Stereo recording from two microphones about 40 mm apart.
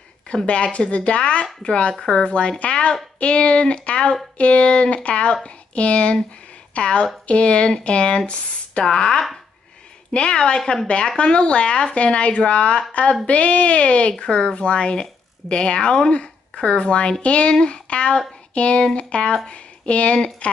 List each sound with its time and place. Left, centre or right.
0.5 s a woman's voice: left
14.2 s a woman's voice: centre